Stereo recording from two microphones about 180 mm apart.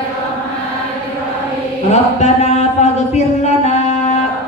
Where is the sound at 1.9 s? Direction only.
40° left (ahead or behind).